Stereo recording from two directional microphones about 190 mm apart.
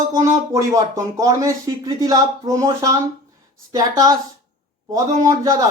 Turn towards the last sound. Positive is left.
turn(degrees=-20)  # may be behind; listen again after turning